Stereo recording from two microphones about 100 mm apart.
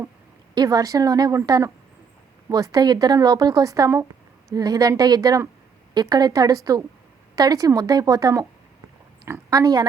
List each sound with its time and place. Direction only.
0.5 s a woman's voice: 40° right (ahead or behind)